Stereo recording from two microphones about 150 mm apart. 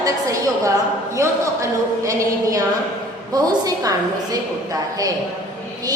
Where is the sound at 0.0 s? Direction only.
20° right (ahead or behind).